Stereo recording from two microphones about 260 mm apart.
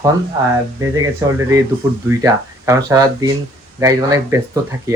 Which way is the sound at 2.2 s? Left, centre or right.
Centre.